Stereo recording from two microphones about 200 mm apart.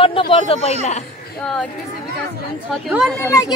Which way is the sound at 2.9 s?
Centre (ahead or behind).